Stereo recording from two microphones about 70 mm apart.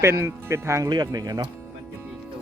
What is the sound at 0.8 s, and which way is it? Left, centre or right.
Speech, right.